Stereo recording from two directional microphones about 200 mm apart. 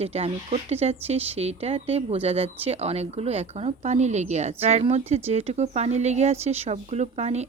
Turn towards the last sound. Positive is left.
turn(degrees=-35)  # may be behind; listen again after turning